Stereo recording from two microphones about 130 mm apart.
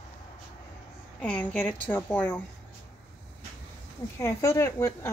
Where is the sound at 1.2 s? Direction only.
10° left (ahead or behind).